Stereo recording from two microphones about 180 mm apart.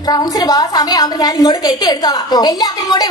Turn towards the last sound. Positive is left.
turn(degrees=20)  # may be behind; listen again after turning